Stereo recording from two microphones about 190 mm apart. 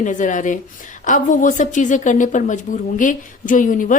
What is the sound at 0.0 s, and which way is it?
A woman's voice, 40° left (ahead or behind).